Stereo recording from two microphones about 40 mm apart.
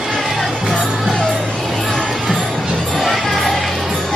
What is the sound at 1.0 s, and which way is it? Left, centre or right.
Music, centre.